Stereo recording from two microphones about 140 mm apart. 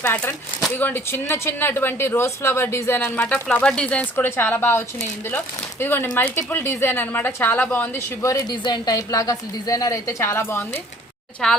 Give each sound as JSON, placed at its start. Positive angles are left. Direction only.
{"t": 0.0, "sound": "speech", "side_deg": 15}
{"t": 5.8, "sound": "speech", "side_deg": 15}
{"t": 11.4, "sound": "a woman's voice", "side_deg": 5}